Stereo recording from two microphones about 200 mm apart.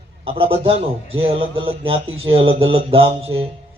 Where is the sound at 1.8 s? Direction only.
30° right (ahead or behind).